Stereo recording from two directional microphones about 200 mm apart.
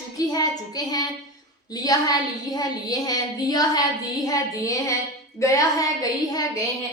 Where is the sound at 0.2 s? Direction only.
20° left (ahead or behind).